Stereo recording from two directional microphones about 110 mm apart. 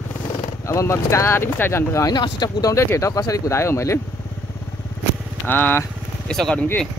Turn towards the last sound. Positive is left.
turn(degrees=5)  # may be behind; listen again after turning